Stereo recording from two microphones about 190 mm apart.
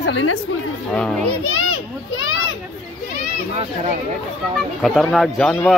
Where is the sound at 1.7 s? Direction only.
90° left.